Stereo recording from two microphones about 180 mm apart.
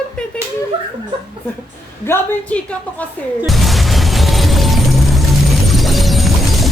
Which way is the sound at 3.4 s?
Centre (ahead or behind).